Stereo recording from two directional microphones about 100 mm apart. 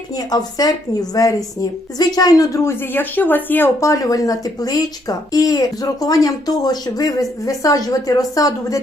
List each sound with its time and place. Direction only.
0.3 s speech: 40° left (ahead or behind); by 3.7 s 20° left (ahead or behind)
3.8 s speech: 35° left (ahead or behind)